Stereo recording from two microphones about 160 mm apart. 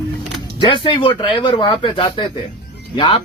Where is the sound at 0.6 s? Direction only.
30° left (ahead or behind).